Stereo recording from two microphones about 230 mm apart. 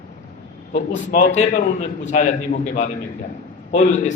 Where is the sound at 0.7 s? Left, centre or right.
Left.